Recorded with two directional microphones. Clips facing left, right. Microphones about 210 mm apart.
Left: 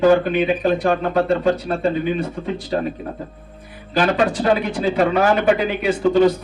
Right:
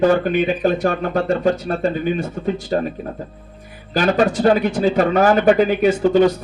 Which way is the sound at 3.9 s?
45° right (ahead or behind).